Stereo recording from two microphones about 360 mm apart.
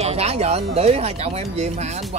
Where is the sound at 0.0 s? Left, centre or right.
Centre.